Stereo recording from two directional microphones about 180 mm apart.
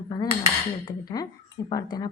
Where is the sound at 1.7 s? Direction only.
20° left (ahead or behind).